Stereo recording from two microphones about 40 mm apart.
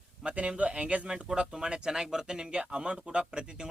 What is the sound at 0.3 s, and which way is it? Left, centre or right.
Speech, right.